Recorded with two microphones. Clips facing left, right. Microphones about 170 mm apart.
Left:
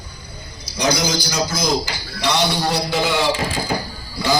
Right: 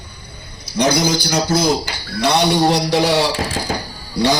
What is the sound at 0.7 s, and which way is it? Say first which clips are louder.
A man's voice: right 4 dB; 60° right (ahead or behind).